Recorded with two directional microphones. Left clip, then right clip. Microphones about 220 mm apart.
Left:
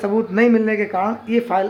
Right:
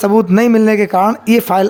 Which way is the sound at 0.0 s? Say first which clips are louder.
Right 6 dB; 45° right (ahead or behind).